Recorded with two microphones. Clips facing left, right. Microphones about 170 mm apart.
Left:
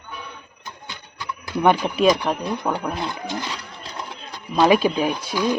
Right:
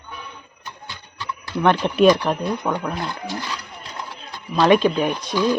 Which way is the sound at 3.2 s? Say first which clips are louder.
Left 1 dB; 20° left (ahead or behind).